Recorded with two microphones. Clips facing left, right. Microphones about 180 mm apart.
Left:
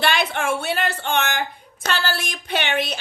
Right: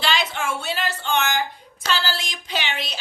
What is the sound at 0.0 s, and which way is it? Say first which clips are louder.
Speech: left 3 dB; 60° left (ahead or behind).